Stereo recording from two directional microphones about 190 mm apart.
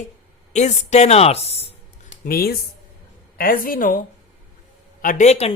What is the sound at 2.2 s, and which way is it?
A woman's voice, 50° left (ahead or behind).